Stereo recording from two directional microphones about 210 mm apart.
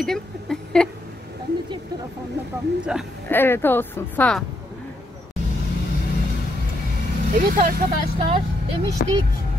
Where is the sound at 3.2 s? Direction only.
10° left (ahead or behind).